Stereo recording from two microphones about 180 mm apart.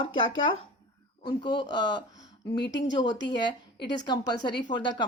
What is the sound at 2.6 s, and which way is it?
Speech, 85° left.